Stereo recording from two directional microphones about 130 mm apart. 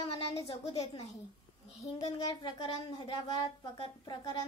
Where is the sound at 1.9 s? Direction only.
35° left (ahead or behind).